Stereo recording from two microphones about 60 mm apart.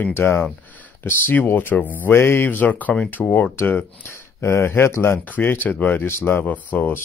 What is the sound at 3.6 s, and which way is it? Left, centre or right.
Speech, left.